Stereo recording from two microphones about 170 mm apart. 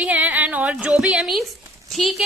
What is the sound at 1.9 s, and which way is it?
Speech, centre (ahead or behind).